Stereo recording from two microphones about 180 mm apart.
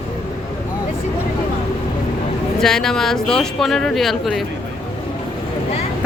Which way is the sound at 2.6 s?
5° left (ahead or behind).